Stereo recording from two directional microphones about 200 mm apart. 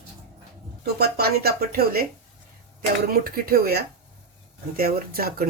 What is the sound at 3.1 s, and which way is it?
Speech, 50° right (ahead or behind).